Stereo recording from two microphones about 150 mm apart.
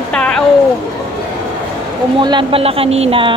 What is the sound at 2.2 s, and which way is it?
Speech, 30° right (ahead or behind).